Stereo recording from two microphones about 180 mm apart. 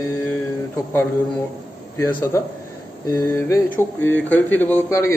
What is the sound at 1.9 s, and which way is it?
Speech, 15° left (ahead or behind).